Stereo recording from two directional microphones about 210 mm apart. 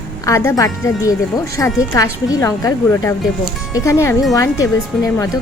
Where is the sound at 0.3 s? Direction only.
15° left (ahead or behind).